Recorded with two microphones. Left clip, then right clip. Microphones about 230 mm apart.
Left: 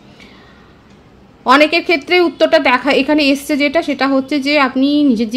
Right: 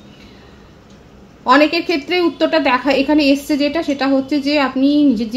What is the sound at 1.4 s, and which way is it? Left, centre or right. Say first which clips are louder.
A woman's voice: left 2 dB; left.